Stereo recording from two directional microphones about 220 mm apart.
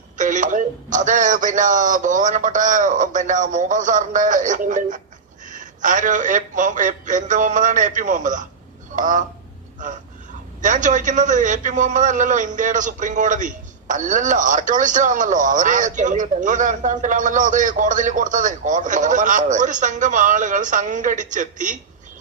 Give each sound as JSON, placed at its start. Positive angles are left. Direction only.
{"t": 0.2, "sound": "a man's voice", "side_deg": -35}
{"t": 10.6, "sound": "a man's voice", "side_deg": -35}